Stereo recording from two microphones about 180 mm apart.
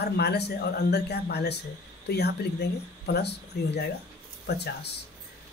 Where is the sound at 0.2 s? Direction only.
65° left (ahead or behind).